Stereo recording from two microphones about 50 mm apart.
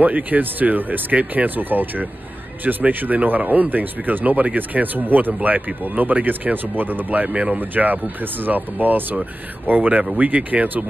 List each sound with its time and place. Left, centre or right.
0.0 s speech: right
7.3 s speech: right
7.7 s speech: right